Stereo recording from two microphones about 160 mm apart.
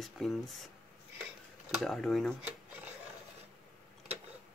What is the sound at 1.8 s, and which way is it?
Speech, centre (ahead or behind).